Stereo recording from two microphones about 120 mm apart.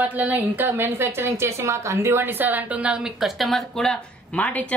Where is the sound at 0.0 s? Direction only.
15° right (ahead or behind).